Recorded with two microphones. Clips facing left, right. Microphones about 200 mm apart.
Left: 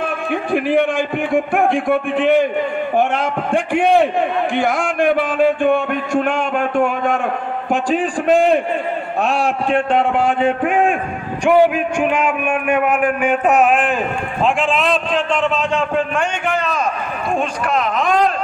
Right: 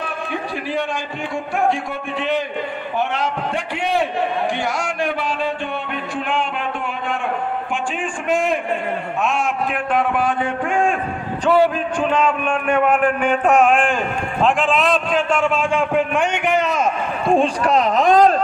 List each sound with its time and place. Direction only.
0.0 s a man's voice: 50° left (ahead or behind)
4.6 s a sound: 55° left (ahead or behind)
7.7 s a man's voice: 40° left (ahead or behind); by 16.8 s 20° right (ahead or behind)
17.3 s speech: 30° right (ahead or behind)